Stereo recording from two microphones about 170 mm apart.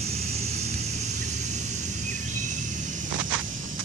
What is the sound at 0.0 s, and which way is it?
Vehicle, 40° right (ahead or behind).